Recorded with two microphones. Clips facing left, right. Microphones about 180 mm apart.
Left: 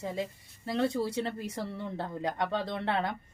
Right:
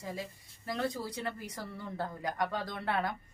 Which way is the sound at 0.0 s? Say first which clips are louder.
Left 6 dB; 25° left (ahead or behind).